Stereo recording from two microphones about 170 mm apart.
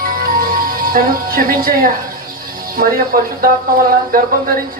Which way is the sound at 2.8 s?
55° right (ahead or behind).